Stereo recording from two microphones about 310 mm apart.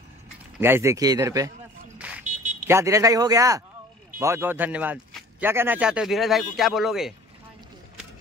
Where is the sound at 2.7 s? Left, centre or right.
Centre.